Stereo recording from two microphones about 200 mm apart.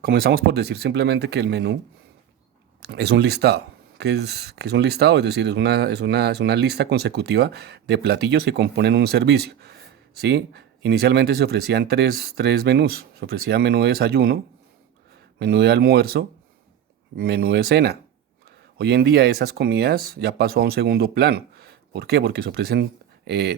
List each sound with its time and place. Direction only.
0.0 s speech: 50° right (ahead or behind)
2.8 s speech: 55° right (ahead or behind)
15.4 s speech: 55° right (ahead or behind)